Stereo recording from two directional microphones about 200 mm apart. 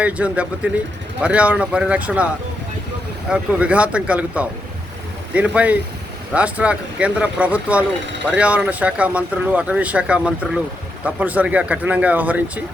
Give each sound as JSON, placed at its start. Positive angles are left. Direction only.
{"t": 0.0, "sound": "speech", "side_deg": -5}